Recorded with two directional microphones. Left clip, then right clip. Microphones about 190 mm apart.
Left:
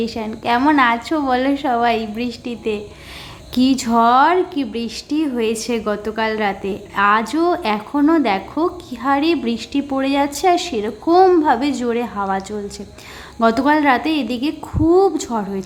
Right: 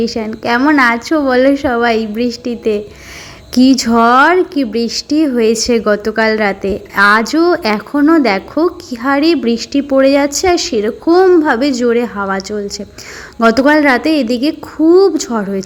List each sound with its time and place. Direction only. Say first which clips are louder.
0.2 s a woman's voice: right 1 dB; 20° right (ahead or behind)
3.8 s a woman's voice: right 3 dB; 20° right (ahead or behind)
13.4 s a woman's voice: right 6 dB; 15° right (ahead or behind)